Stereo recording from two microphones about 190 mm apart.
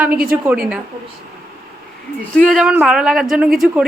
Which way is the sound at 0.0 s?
10° right (ahead or behind).